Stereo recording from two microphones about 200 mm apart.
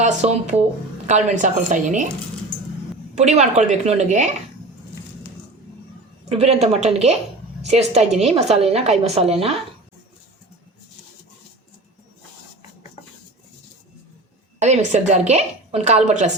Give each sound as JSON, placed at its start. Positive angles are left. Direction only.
{"t": 0.0, "sound": "a woman's voice", "side_deg": -35}
{"t": 3.2, "sound": "a woman's voice", "side_deg": -35}
{"t": 6.2, "sound": "a woman's voice", "side_deg": -30}
{"t": 14.6, "sound": "a woman's voice", "side_deg": -35}